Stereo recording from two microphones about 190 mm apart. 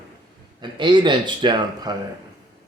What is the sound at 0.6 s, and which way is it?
A man's voice, 25° right (ahead or behind).